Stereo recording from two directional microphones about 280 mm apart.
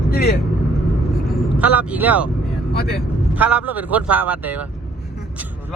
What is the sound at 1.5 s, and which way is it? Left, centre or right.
Speech, centre.